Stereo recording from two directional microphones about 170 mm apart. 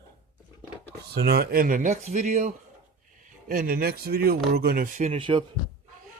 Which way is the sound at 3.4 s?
55° right (ahead or behind).